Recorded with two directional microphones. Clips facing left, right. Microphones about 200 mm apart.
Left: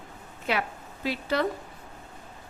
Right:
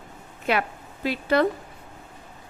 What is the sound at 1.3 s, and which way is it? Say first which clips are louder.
Speech: right 6 dB; 60° right (ahead or behind).